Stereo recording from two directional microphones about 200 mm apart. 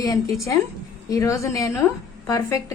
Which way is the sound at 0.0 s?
20° left (ahead or behind).